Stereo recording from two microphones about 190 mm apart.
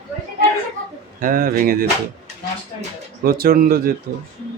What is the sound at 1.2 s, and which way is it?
Speech, 50° right (ahead or behind).